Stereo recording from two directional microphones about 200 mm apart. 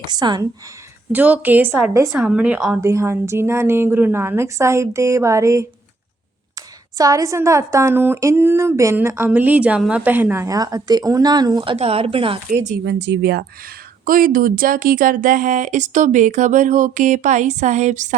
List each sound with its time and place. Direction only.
0.0 s a woman's voice: 20° right (ahead or behind)
1.1 s speech: 10° right (ahead or behind)
2.8 s speech: 15° right (ahead or behind)
6.9 s speech: 15° right (ahead or behind)
12.8 s speech: 60° right (ahead or behind)
14.0 s speech: 45° right (ahead or behind)